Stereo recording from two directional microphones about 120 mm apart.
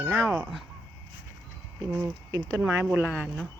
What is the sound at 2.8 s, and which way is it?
Crowing, 10° right (ahead or behind).